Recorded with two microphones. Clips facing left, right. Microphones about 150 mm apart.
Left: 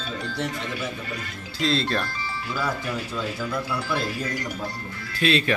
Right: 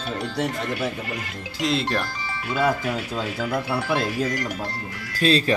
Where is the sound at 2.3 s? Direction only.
75° right (ahead or behind).